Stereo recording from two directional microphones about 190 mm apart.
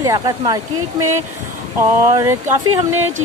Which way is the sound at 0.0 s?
20° right (ahead or behind).